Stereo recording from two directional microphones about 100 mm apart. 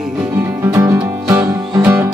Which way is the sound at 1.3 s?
25° right (ahead or behind).